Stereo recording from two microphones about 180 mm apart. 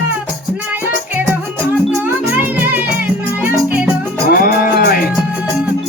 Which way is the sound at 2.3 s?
10° right (ahead or behind).